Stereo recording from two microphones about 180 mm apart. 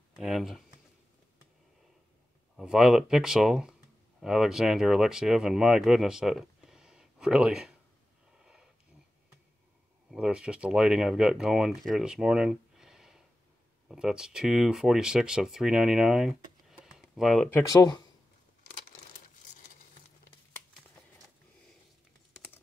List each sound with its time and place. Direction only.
0.1 s speech: centre (ahead or behind)
2.5 s speech: 5° right (ahead or behind)
8.4 s a sound: 5° right (ahead or behind)
10.1 s speech: 5° right (ahead or behind)
17.6 s speech: 20° left (ahead or behind)